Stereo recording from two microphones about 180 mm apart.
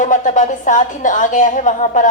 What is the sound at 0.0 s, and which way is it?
A woman's voice, 45° left (ahead or behind).